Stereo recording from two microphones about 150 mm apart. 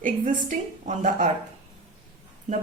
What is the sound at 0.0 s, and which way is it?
A woman's voice, 60° right (ahead or behind).